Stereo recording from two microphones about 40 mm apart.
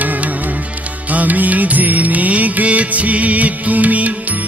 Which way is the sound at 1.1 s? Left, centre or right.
Right.